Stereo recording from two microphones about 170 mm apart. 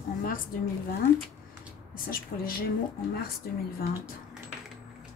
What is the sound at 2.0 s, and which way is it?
Speech, 55° left (ahead or behind).